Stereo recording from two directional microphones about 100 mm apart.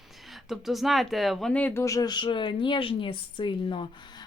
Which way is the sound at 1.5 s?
15° left (ahead or behind).